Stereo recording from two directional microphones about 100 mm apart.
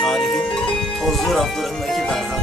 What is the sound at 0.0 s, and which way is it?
Music, 5° left (ahead or behind).